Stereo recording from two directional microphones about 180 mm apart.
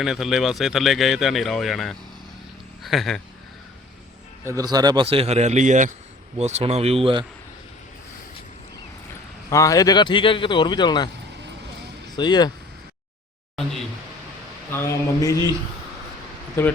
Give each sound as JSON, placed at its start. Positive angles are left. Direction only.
{"t": 0.0, "sound": "speech", "side_deg": 0}
{"t": 4.4, "sound": "a man's voice", "side_deg": -20}
{"t": 9.5, "sound": "speech", "side_deg": 20}
{"t": 12.1, "sound": "speech", "side_deg": 25}
{"t": 14.7, "sound": "speech", "side_deg": 15}